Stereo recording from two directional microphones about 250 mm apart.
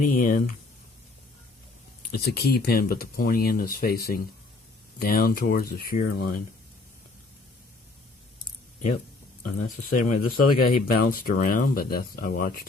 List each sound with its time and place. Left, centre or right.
0.0 s speech: left
2.1 s speech: left
10.0 s speech: left
10.5 s speech: left